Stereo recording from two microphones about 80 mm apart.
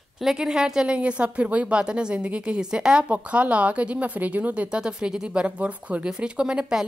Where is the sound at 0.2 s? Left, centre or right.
Centre.